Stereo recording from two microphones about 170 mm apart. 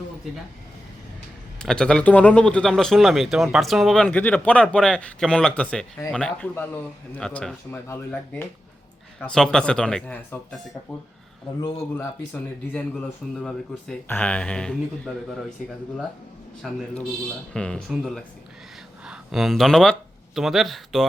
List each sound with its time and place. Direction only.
1.5 s a man's voice: 5° left (ahead or behind)
11.6 s speech: 15° left (ahead or behind)
16.6 s a man's voice: centre (ahead or behind)